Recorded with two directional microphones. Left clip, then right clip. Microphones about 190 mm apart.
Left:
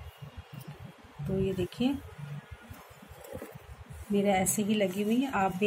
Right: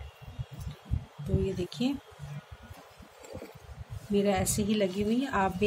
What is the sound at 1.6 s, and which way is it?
Speech, centre (ahead or behind).